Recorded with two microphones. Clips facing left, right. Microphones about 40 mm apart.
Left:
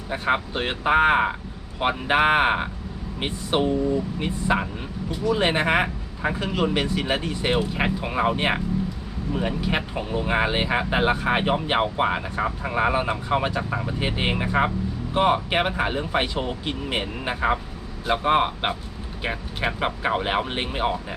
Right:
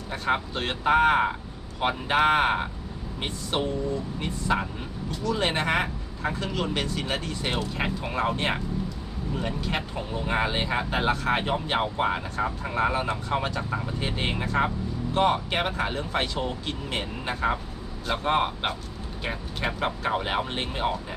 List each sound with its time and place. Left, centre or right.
0.1 s speech: centre